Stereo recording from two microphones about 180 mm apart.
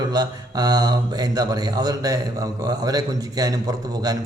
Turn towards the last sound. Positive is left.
turn(degrees=-20)  # may be behind; listen again after turning